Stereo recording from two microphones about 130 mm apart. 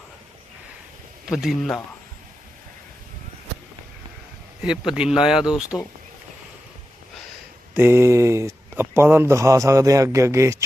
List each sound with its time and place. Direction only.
1.2 s speech: 5° right (ahead or behind)
4.6 s speech: 5° right (ahead or behind)
7.7 s speech: 15° right (ahead or behind)